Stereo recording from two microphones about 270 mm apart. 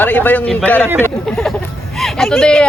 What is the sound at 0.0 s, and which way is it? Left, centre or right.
Speech, centre.